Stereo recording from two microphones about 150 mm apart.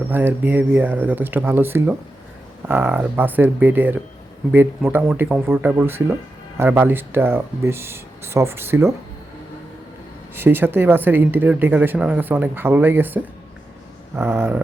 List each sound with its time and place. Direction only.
0.1 s speech: 10° right (ahead or behind)
10.3 s speech: 15° right (ahead or behind)